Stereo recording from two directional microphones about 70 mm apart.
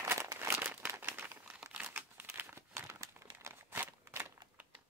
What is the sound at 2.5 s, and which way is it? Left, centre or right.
Crumpling, right.